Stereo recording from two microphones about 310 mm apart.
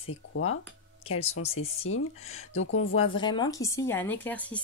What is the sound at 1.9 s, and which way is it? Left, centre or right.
Speech, left.